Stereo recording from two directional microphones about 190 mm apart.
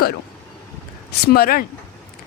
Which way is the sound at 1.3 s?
50° left (ahead or behind).